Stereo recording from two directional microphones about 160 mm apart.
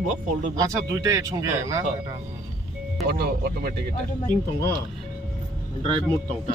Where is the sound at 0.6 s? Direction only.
20° right (ahead or behind).